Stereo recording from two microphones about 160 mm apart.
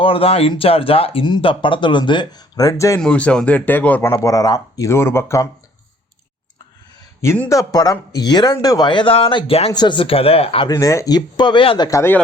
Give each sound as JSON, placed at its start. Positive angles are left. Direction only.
{"t": 0.0, "sound": "speech", "side_deg": 35}
{"t": 3.0, "sound": "speech", "side_deg": 5}
{"t": 4.1, "sound": "speech", "side_deg": 20}
{"t": 7.2, "sound": "speech", "side_deg": 15}
{"t": 10.7, "sound": "speech", "side_deg": 20}
{"t": 11.9, "sound": "speech", "side_deg": 15}